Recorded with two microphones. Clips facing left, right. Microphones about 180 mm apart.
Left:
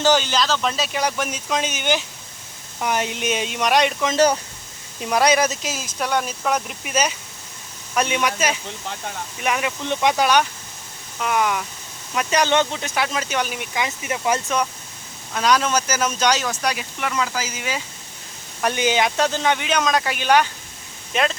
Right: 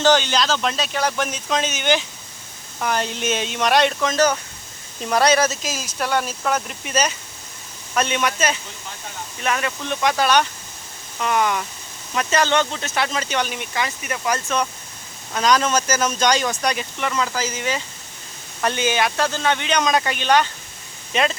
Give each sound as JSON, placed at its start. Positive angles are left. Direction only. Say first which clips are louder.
{"t": 0.0, "sound": "speech", "louder": "right 1 dB", "side_deg": 5}
{"t": 4.1, "sound": "speech", "louder": "left 4 dB", "side_deg": 30}
{"t": 4.9, "sound": "speech", "louder": "right 1 dB", "side_deg": 10}
{"t": 5.8, "sound": "speech", "louder": "right 1 dB", "side_deg": -5}
{"t": 6.2, "sound": "speech", "louder": "even", "side_deg": 10}
{"t": 13.8, "sound": "speech", "louder": "left 3 dB", "side_deg": 20}
{"t": 15.3, "sound": "speech", "louder": "right 1 dB", "side_deg": 5}